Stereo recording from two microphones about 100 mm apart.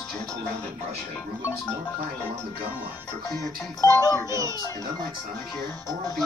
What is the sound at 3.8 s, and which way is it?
Speech, 35° left (ahead or behind).